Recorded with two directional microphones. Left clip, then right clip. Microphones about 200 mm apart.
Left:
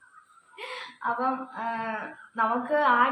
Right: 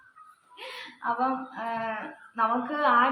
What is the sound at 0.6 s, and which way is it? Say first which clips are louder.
Whimper: left 2 dB; 15° left (ahead or behind).